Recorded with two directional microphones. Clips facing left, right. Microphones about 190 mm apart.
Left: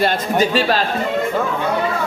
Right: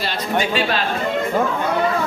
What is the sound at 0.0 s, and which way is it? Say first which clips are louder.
Speech: left 5 dB; 45° left (ahead or behind).